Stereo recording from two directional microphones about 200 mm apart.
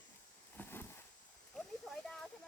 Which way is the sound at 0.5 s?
10° left (ahead or behind).